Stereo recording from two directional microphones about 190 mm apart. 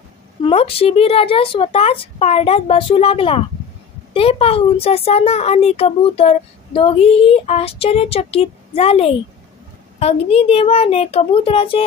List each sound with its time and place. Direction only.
0.4 s speech: 30° left (ahead or behind)